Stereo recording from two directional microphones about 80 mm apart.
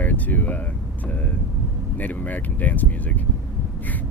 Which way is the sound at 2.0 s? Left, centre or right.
Left.